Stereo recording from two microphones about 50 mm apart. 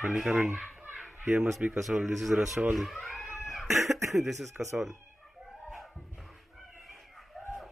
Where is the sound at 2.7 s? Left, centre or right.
Centre.